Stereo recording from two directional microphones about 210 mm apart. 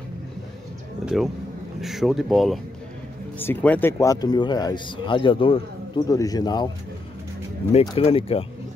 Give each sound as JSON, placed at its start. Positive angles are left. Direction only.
{"t": 1.0, "sound": "speech", "side_deg": 0}
{"t": 7.8, "sound": "speech", "side_deg": 25}